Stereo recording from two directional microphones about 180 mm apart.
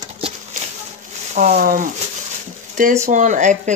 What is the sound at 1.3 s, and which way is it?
Speech, 45° right (ahead or behind).